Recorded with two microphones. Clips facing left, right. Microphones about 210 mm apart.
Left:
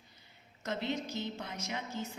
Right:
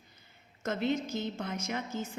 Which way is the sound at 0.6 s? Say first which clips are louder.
Right 5 dB; 50° right (ahead or behind).